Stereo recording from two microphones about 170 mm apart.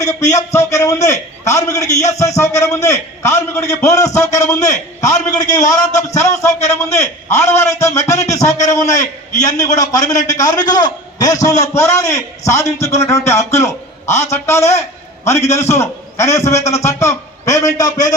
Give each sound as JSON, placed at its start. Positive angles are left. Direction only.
{"t": 0.0, "sound": "a man's voice", "side_deg": 20}
{"t": 14.8, "sound": "a sound", "side_deg": 15}
{"t": 15.5, "sound": "a man's voice", "side_deg": 15}